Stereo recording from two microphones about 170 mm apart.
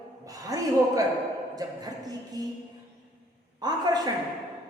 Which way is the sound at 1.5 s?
20° right (ahead or behind).